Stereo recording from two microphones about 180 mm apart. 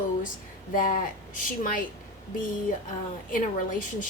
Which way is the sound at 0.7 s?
50° left (ahead or behind).